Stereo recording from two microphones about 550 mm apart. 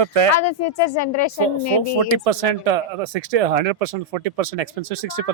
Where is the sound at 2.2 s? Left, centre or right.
Right.